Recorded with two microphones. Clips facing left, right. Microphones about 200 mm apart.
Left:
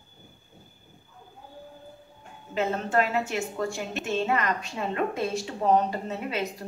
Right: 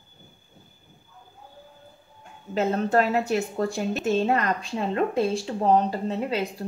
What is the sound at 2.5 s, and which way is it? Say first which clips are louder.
A woman's voice: right 3 dB; 40° right (ahead or behind).